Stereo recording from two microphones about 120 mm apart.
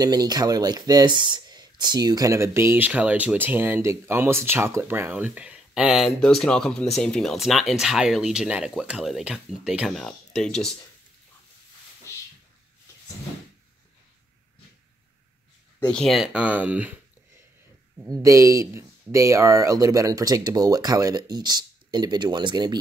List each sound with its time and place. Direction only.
0.0 s speech: 30° right (ahead or behind); by 10.7 s 5° left (ahead or behind)
15.9 s speech: 5° left (ahead or behind); by 16.9 s 10° right (ahead or behind)
18.0 s speech: 30° right (ahead or behind)